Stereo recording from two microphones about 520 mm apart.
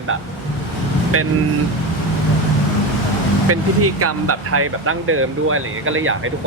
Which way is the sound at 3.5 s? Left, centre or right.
Right.